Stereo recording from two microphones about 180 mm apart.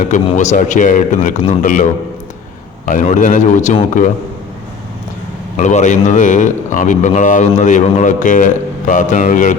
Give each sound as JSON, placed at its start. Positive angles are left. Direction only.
{"t": 0.0, "sound": "a man's voice", "side_deg": 45}
{"t": 5.5, "sound": "a man's voice", "side_deg": 40}